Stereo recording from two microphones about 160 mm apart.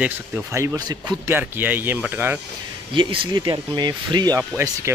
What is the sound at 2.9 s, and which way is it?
Speech, 30° right (ahead or behind).